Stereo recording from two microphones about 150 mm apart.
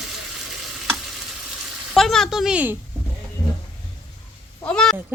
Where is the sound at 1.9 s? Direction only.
Centre (ahead or behind).